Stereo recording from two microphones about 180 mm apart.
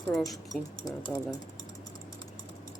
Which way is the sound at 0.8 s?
20° left (ahead or behind).